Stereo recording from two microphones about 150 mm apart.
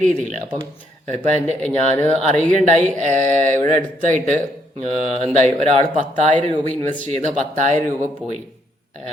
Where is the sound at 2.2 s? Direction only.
55° right (ahead or behind).